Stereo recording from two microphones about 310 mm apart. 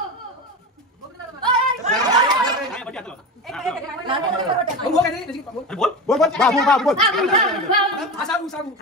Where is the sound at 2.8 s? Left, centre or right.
Centre.